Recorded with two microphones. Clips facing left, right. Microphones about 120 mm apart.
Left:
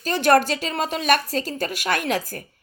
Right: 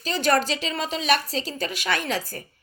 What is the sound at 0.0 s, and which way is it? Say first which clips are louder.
A woman's voice: left 5 dB; 50° left (ahead or behind).